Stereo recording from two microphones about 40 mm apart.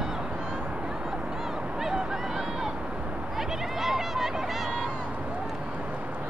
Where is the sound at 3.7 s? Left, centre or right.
Centre.